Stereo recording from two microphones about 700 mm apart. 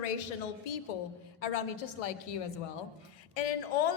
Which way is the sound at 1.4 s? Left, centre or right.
Left.